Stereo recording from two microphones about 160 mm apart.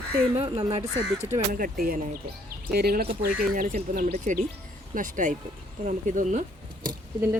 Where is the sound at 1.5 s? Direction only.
60° right (ahead or behind).